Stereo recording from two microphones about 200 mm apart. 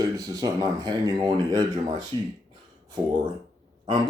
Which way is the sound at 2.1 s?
25° right (ahead or behind).